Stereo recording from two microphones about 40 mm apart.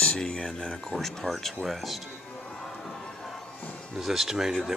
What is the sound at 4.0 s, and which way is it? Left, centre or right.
Speech, centre.